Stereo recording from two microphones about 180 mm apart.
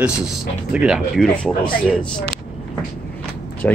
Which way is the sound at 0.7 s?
5° right (ahead or behind).